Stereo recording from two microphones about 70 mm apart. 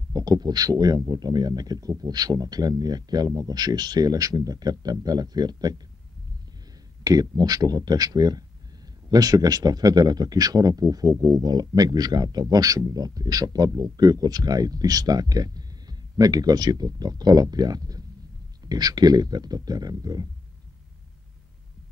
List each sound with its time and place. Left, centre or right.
0.1 s speech: right
7.0 s speech: right